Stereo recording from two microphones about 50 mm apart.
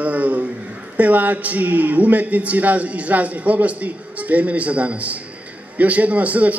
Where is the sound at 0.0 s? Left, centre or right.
Right.